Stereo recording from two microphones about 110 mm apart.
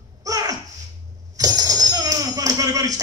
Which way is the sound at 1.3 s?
35° right (ahead or behind).